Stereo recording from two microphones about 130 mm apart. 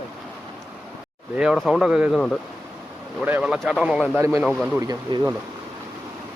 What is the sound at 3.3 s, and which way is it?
Speech, 10° right (ahead or behind).